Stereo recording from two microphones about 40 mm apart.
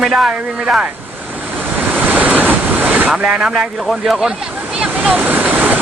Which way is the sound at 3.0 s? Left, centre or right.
Right.